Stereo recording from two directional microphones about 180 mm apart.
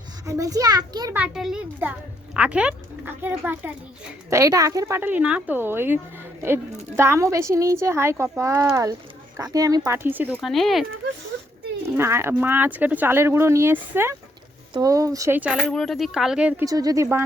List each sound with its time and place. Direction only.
0.3 s a child's voice: 20° right (ahead or behind)
1.2 s a child's voice: 5° right (ahead or behind)
10.3 s speech: centre (ahead or behind)
11.9 s a child's voice: 15° right (ahead or behind)
16.6 s a child's voice: 20° right (ahead or behind)